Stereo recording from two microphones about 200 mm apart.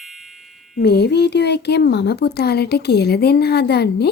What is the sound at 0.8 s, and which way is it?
Speech, 55° left (ahead or behind).